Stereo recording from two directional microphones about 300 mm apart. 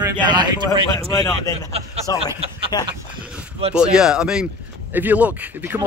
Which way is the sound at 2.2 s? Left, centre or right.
Centre.